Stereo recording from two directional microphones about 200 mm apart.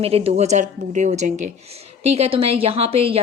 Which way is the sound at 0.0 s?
30° right (ahead or behind).